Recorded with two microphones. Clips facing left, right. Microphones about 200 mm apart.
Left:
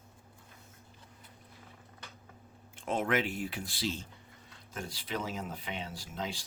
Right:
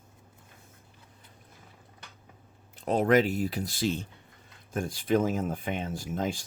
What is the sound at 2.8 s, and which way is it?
Speech, 40° right (ahead or behind).